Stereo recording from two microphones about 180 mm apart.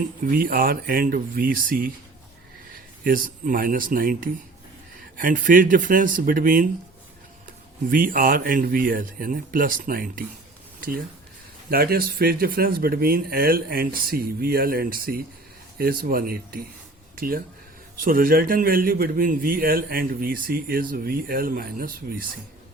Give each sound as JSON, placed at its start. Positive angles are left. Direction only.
{"t": 0.3, "sound": "a man's voice", "side_deg": -50}
{"t": 3.0, "sound": "a man's voice", "side_deg": -50}
{"t": 7.9, "sound": "a man's voice", "side_deg": -50}
{"t": 10.8, "sound": "a sound", "side_deg": -50}
{"t": 11.7, "sound": "a man's voice", "side_deg": -55}